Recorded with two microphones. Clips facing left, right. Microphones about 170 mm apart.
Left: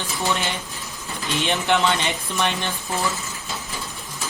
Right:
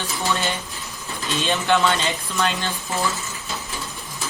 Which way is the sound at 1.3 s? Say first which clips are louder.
Right 1 dB; 20° left (ahead or behind).